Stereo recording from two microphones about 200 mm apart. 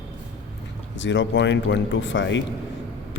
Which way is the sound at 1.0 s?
65° left (ahead or behind).